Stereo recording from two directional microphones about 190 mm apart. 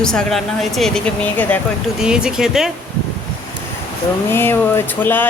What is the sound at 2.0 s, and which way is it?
Speech, 5° right (ahead or behind).